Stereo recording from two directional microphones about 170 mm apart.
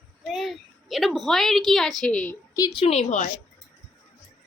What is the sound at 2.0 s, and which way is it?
Speech, 5° left (ahead or behind).